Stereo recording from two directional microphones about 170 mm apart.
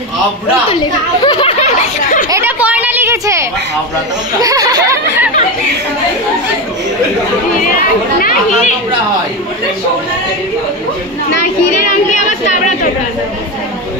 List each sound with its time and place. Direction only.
1.2 s snicker: 25° left (ahead or behind)
1.6 s snicker: 45° left (ahead or behind)
2.3 s a sound: 10° right (ahead or behind)
4.4 s speech: 20° right (ahead or behind)
12.1 s speech: 45° left (ahead or behind)